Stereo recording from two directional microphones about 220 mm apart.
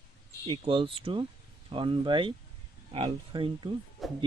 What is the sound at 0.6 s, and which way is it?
Speech, 25° right (ahead or behind).